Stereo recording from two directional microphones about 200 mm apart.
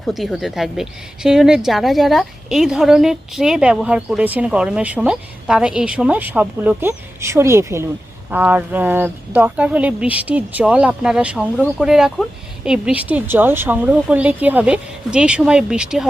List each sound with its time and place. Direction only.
0.0 s a woman's voice: centre (ahead or behind)